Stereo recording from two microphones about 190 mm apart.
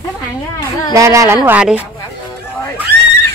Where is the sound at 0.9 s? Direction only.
15° right (ahead or behind).